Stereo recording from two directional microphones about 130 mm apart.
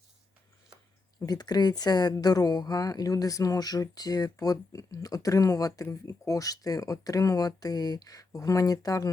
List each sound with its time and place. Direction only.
1.2 s speech: 30° left (ahead or behind)